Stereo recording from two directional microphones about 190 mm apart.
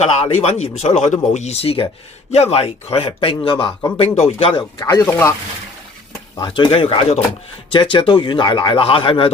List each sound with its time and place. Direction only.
0.3 s speech: 35° left (ahead or behind); by 5.3 s 15° left (ahead or behind)
6.4 s speech: 25° left (ahead or behind)